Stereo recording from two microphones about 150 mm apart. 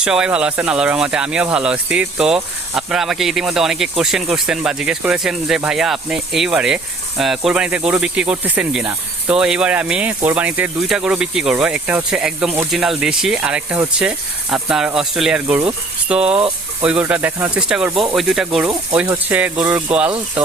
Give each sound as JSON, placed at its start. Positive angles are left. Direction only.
{"t": 0.0, "sound": "speech", "side_deg": -5}
{"t": 18.9, "sound": "speech", "side_deg": -15}